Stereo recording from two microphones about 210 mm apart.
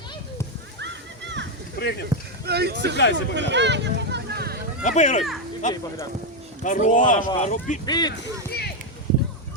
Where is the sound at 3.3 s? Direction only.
55° right (ahead or behind).